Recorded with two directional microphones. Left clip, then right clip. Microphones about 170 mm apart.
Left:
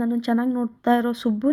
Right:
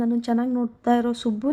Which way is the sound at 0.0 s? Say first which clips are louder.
Left 1 dB; 15° left (ahead or behind).